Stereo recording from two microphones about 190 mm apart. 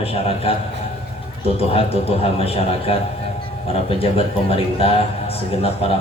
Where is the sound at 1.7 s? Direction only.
30° left (ahead or behind).